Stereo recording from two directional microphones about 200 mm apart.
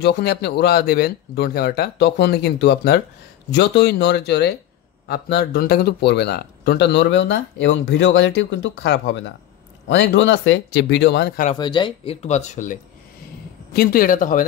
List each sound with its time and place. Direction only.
0.0 s speech: 55° left (ahead or behind)
11.5 s speech: 25° left (ahead or behind); by 12.7 s 40° left (ahead or behind)
13.7 s speech: 45° left (ahead or behind)